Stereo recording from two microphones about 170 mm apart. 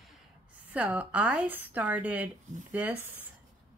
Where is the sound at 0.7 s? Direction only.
10° right (ahead or behind).